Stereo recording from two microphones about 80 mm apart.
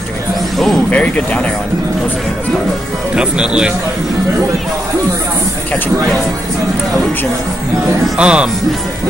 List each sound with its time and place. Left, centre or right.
0.8 s speech: centre
3.2 s speech: centre
8.2 s speech: centre